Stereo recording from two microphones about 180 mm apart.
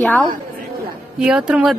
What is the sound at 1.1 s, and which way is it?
Speech, 5° right (ahead or behind).